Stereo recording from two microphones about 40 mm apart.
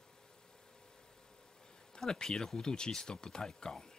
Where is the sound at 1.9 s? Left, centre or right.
Centre.